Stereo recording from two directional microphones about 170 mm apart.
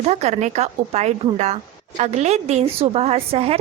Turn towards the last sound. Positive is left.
turn(degrees=-35)  # may be behind; listen again after turning